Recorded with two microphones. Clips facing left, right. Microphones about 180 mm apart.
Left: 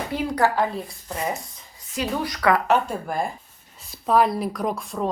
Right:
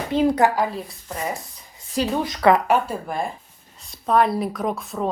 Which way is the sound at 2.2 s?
25° right (ahead or behind).